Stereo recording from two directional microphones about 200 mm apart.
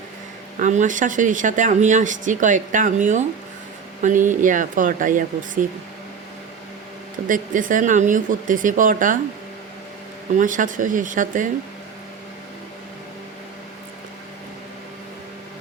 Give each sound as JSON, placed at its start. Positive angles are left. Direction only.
{"t": 0.6, "sound": "speech", "side_deg": -40}
{"t": 7.3, "sound": "speech", "side_deg": -40}
{"t": 10.3, "sound": "speech", "side_deg": -40}